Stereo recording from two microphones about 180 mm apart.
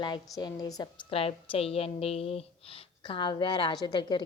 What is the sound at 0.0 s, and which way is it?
A woman's voice, 25° left (ahead or behind).